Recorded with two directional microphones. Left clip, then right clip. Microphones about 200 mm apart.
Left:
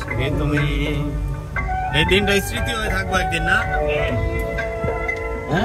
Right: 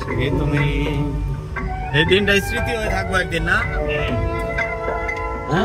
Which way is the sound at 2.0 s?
5° right (ahead or behind).